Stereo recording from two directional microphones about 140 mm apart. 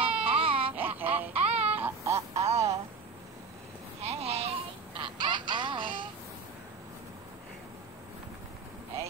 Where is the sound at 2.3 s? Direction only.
50° right (ahead or behind).